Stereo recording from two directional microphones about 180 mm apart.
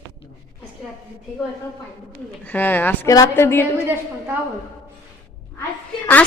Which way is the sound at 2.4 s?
10° left (ahead or behind).